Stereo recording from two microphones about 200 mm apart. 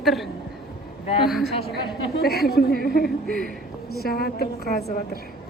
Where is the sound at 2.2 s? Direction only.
50° left (ahead or behind).